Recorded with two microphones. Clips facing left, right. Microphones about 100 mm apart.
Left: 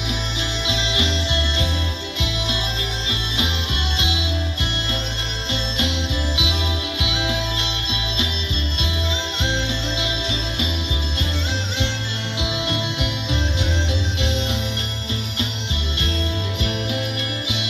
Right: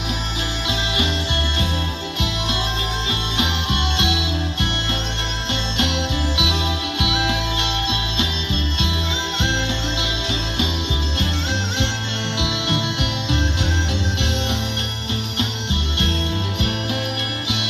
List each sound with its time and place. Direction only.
0.7 s music: 50° right (ahead or behind)
4.0 s music: 65° right (ahead or behind)
5.5 s music: 65° right (ahead or behind)
12.4 s music: 70° right (ahead or behind)